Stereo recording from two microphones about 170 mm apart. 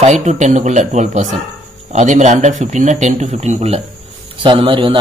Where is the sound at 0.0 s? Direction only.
40° right (ahead or behind).